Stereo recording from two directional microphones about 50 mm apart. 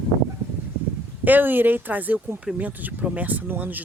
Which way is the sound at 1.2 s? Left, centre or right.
Right.